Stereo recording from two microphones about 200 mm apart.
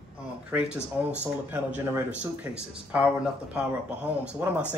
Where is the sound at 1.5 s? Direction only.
10° right (ahead or behind).